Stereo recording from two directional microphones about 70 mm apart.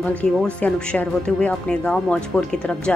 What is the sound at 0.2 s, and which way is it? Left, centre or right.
A woman's voice, centre.